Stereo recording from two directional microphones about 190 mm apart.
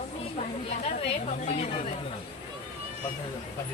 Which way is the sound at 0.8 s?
35° left (ahead or behind).